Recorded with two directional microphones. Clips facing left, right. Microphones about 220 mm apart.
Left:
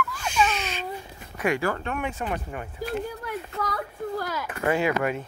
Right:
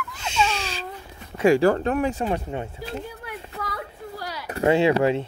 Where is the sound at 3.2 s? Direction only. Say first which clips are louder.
Left 3 dB; 50° left (ahead or behind).